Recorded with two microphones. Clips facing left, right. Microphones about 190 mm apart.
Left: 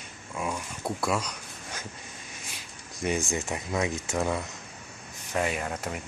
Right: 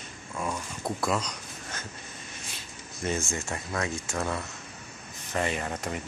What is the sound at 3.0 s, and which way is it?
Speech, 15° left (ahead or behind).